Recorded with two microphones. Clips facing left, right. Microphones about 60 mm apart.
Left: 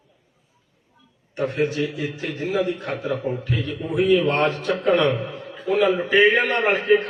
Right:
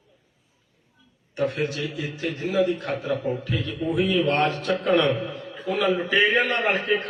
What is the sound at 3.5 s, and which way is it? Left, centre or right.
Speech, centre.